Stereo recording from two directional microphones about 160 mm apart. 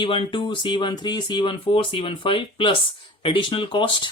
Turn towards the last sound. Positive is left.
turn(degrees=30)  # may be behind; listen again after turning